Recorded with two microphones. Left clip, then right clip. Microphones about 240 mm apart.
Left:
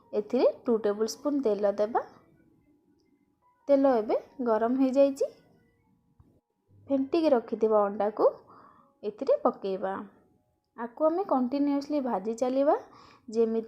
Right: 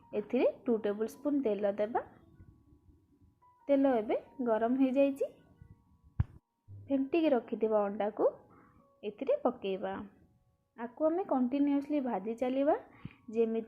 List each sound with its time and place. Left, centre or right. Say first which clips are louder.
0.3 s a woman's voice: left 5 dB; left
3.8 s a woman's voice: left 5 dB; left
4.9 s speech: left 8 dB; centre
7.2 s a woman's voice: left 6 dB; left
11.4 s speech: left 3 dB; centre
11.9 s a woman's voice: left 5 dB; left